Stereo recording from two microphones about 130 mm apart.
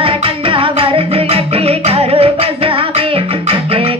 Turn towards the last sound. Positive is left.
turn(degrees=-45)  # may be behind; listen again after turning